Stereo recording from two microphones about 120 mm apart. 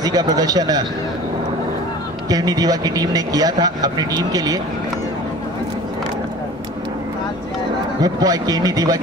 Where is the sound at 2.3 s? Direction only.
30° right (ahead or behind).